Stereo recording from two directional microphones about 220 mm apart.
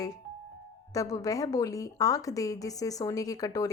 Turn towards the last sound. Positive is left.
turn(degrees=15)  # may be behind; listen again after turning